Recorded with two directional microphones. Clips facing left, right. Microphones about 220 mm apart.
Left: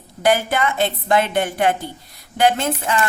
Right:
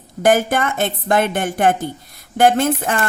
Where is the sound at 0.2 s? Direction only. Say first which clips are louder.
Right 3 dB; 45° right (ahead or behind).